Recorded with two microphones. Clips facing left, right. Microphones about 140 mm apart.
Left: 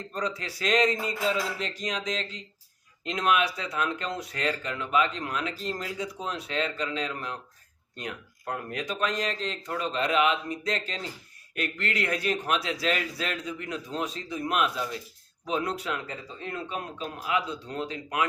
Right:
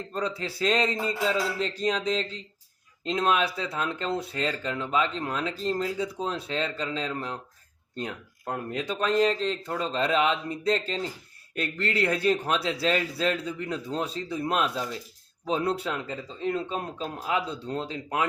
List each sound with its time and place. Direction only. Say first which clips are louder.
0.1 s a man's voice: right 1 dB; 30° right (ahead or behind)